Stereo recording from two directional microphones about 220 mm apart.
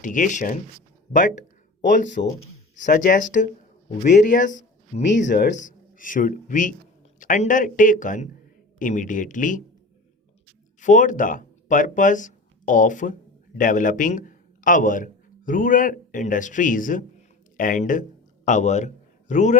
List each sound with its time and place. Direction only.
0.0 s a man's voice: 35° left (ahead or behind)
1.8 s a man's voice: 35° left (ahead or behind)
5.3 s speech: 50° left (ahead or behind)
5.5 s a man's voice: 35° left (ahead or behind)
10.8 s a man's voice: 35° left (ahead or behind)